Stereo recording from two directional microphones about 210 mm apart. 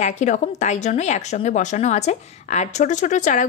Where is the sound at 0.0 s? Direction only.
35° left (ahead or behind).